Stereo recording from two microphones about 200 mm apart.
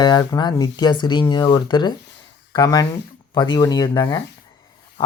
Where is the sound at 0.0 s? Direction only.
20° left (ahead or behind).